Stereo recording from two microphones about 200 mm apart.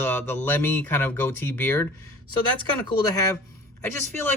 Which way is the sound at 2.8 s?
20° left (ahead or behind).